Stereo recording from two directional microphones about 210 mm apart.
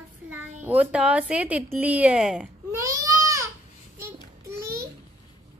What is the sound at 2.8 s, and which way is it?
Baby cry, 15° right (ahead or behind).